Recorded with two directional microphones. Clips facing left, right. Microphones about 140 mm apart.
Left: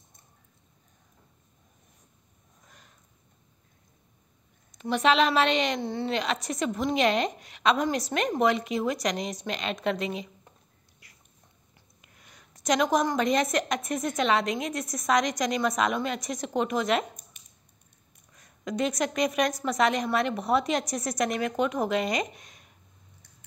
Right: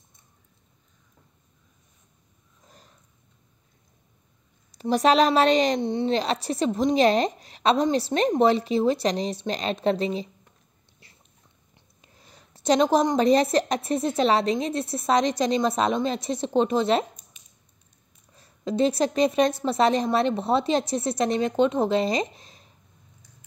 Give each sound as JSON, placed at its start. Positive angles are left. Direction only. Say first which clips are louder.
{"t": 4.6, "sound": "a woman's voice", "louder": "right 4 dB", "side_deg": -35}
{"t": 5.8, "sound": "a woman's voice", "louder": "right 5 dB", "side_deg": -20}
{"t": 6.0, "sound": "a woman's voice", "louder": "right 5 dB", "side_deg": -35}
{"t": 11.7, "sound": "a woman's voice", "louder": "right 2 dB", "side_deg": -30}
{"t": 18.3, "sound": "a woman's voice", "louder": "right 5 dB", "side_deg": -30}